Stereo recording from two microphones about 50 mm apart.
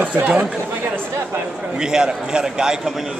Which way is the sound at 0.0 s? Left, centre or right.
Right.